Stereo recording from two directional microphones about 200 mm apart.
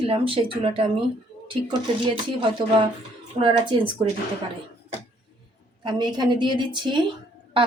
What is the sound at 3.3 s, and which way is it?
Speech, 25° right (ahead or behind).